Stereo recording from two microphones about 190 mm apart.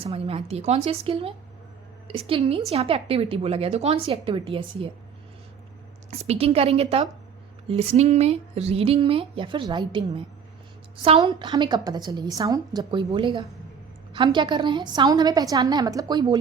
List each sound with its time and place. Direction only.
0.0 s a woman's voice: 30° right (ahead or behind)
6.1 s a woman's voice: 30° right (ahead or behind)